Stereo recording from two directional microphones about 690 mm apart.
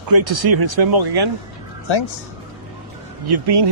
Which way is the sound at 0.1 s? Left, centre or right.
Right.